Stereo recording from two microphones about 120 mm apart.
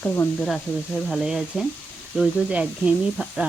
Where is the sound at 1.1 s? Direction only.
5° right (ahead or behind).